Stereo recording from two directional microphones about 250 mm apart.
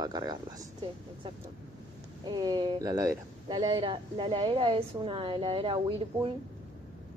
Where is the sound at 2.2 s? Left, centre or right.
Centre.